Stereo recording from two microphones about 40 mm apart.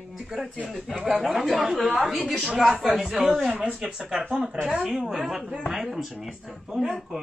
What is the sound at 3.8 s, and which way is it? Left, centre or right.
Speech, right.